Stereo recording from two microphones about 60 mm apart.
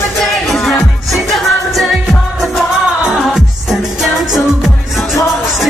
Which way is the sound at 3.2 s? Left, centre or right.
Centre.